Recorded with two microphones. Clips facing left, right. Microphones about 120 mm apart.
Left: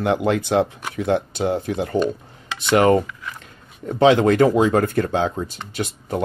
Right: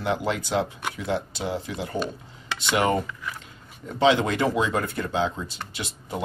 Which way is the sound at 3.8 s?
50° left (ahead or behind).